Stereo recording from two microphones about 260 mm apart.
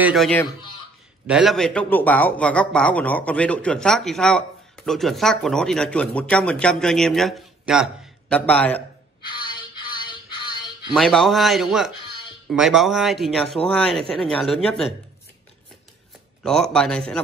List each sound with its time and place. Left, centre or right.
0.0 s a man's voice: centre
10.0 s music: centre
11.0 s a man's voice: centre
16.4 s a man's voice: centre